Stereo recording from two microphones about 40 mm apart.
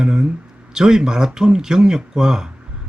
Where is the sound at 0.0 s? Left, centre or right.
Centre.